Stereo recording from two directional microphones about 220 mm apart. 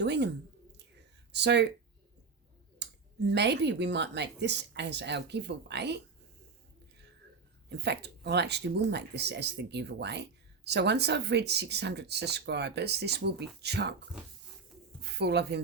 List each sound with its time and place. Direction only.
0.0 s speech: 50° right (ahead or behind)
1.3 s speech: 50° right (ahead or behind)
2.7 s speech: 50° right (ahead or behind)
7.7 s speech: 50° right (ahead or behind)
15.1 s speech: 50° right (ahead or behind)